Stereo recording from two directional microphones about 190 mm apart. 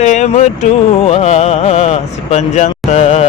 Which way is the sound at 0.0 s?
40° left (ahead or behind).